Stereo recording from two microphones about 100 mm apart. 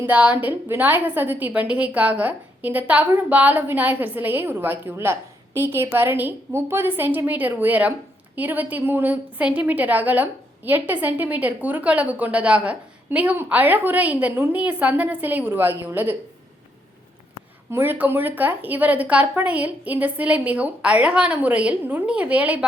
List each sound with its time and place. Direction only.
0.0 s a woman's voice: 15° right (ahead or behind)
17.7 s a woman's voice: 25° right (ahead or behind)